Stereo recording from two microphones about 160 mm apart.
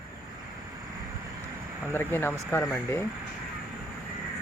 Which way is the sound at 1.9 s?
15° left (ahead or behind).